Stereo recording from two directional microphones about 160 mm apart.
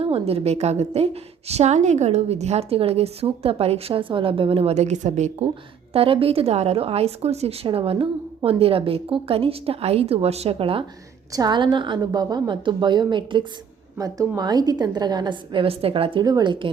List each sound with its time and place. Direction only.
0.0 s a woman's voice: 35° right (ahead or behind)
5.9 s a woman's voice: 35° right (ahead or behind)
11.3 s a woman's voice: 25° right (ahead or behind)